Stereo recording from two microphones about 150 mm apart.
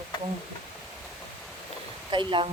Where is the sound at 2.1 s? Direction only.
35° right (ahead or behind).